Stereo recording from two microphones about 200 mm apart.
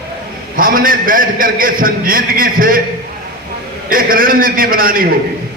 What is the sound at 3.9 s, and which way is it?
A man's voice, 45° right (ahead or behind).